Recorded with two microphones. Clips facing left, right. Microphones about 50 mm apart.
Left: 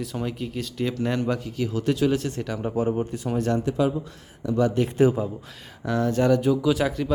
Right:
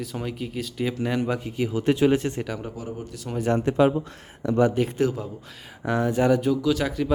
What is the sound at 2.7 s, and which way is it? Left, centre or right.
Speech, left.